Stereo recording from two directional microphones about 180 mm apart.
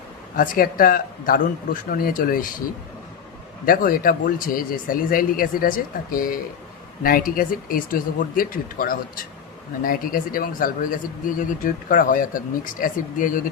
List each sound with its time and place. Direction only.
0.3 s speech: 50° left (ahead or behind)
3.7 s speech: 50° left (ahead or behind)